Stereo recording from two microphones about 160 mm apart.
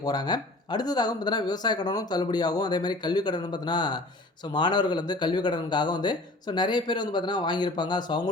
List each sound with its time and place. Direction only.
0.0 s speech: 25° left (ahead or behind)